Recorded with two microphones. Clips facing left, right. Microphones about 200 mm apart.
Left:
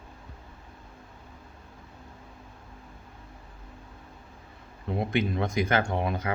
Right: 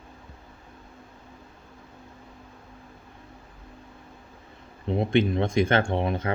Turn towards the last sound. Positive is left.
turn(degrees=-30)  # may be behind; listen again after turning